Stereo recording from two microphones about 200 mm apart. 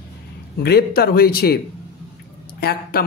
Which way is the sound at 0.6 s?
50° left (ahead or behind).